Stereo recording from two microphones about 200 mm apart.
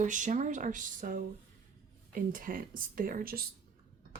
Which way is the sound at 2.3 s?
45° right (ahead or behind).